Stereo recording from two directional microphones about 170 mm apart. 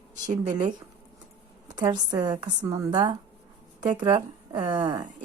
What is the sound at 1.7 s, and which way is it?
A woman's voice, 25° right (ahead or behind).